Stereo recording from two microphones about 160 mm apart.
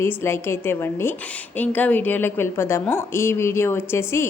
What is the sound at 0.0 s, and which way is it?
A woman's voice, 15° left (ahead or behind).